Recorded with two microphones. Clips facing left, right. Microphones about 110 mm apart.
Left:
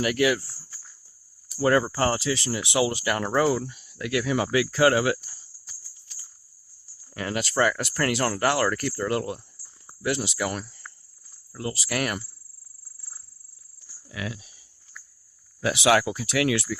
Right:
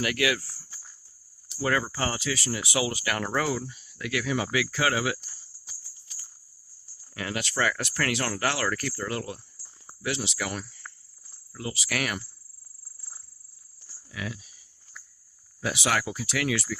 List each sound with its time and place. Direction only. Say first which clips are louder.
0.4 s cricket: left 1 dB; 25° left (ahead or behind)
1.6 s speech: left 6 dB; 35° left (ahead or behind)
3.6 s speech: left 3 dB; 55° left (ahead or behind)
7.1 s speech: left 4 dB; 30° left (ahead or behind)
14.2 s speech: left 2 dB; 55° left (ahead or behind)
15.6 s speech: left 7 dB; 70° left (ahead or behind)